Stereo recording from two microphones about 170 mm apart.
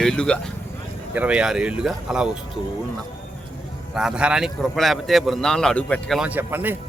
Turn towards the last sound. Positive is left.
turn(degrees=-10)  # may be behind; listen again after turning